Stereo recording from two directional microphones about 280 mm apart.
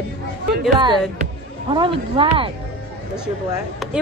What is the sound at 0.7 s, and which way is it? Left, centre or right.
Speech, centre.